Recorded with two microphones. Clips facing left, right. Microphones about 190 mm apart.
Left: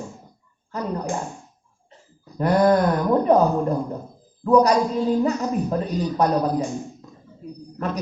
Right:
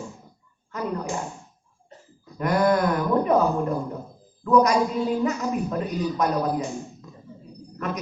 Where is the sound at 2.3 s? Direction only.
35° left (ahead or behind).